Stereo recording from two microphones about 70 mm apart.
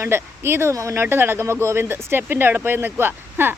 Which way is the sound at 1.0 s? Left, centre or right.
Right.